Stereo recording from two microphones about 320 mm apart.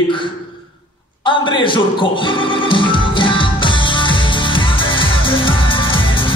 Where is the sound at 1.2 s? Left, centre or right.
Centre.